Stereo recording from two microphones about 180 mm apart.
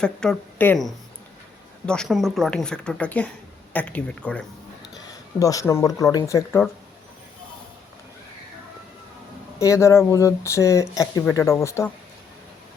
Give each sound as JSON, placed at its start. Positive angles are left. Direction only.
{"t": 0.0, "sound": "speech", "side_deg": 5}
{"t": 5.4, "sound": "speech", "side_deg": 20}
{"t": 9.6, "sound": "speech", "side_deg": 15}